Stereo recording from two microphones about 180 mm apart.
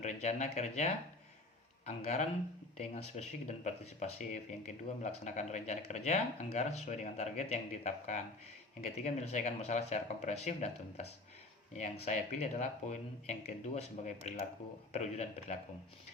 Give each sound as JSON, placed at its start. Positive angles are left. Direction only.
{"t": 0.0, "sound": "speech", "side_deg": 40}